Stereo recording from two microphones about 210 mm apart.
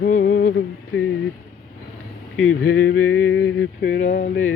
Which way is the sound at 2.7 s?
70° left (ahead or behind).